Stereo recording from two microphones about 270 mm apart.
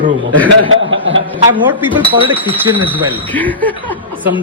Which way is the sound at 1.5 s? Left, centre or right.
Centre.